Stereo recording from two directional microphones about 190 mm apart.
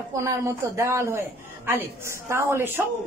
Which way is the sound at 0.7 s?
15° right (ahead or behind).